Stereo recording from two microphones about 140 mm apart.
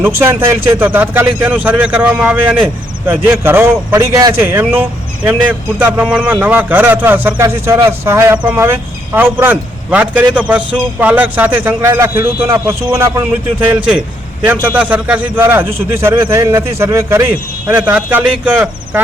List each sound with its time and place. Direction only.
0.0 s a man's voice: 15° right (ahead or behind)